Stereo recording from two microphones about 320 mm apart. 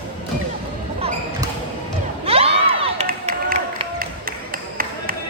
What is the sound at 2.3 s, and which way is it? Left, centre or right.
Crowd, centre.